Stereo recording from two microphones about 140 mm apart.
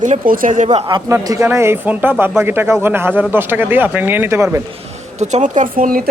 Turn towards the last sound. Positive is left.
turn(degrees=-90)